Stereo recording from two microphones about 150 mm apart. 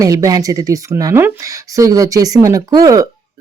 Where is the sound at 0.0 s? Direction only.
25° right (ahead or behind).